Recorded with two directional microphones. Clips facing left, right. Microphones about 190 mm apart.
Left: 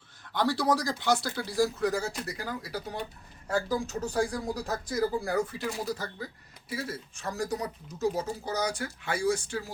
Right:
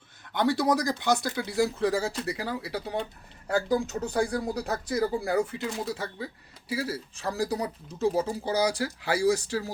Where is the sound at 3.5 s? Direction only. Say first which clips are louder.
Right 3 dB; 60° right (ahead or behind).